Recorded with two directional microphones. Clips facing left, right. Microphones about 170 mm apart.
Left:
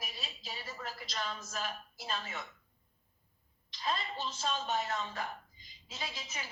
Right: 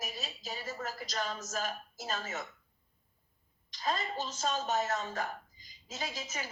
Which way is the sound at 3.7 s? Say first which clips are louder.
Right 2 dB; 45° right (ahead or behind).